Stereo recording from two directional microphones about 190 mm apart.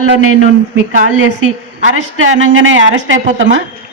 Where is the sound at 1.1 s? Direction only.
90° right.